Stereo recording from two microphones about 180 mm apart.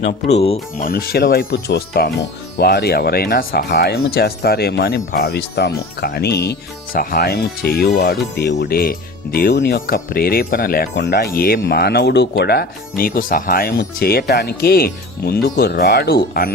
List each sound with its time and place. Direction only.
0.0 s speech: 35° left (ahead or behind)
0.9 s speech: 60° left (ahead or behind)